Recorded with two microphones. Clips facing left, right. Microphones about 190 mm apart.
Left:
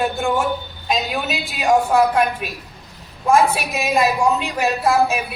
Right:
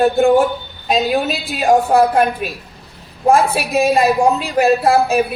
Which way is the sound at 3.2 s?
35° right (ahead or behind).